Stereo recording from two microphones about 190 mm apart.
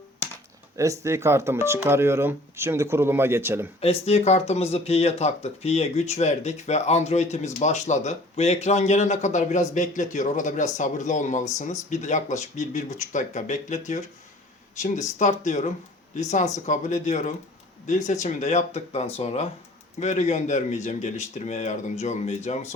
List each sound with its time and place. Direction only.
0.8 s speech: 15° right (ahead or behind)
3.8 s speech: 30° left (ahead or behind)